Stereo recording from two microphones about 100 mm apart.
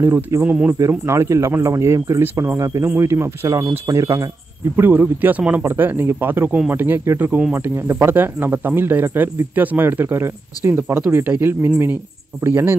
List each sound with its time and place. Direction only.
0.0 s speech: 25° right (ahead or behind)
0.7 s speech: 30° right (ahead or behind)
4.7 s speech: 20° right (ahead or behind)